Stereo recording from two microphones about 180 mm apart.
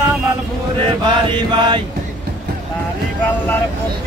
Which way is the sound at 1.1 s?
25° right (ahead or behind).